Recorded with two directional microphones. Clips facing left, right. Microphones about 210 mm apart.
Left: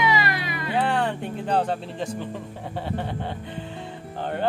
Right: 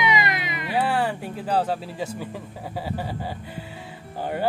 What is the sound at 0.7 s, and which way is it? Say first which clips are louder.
Speech: even; 5° right (ahead or behind).